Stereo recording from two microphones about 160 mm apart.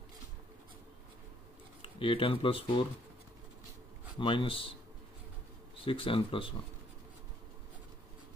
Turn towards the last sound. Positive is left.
turn(degrees=35)  # may be behind; listen again after turning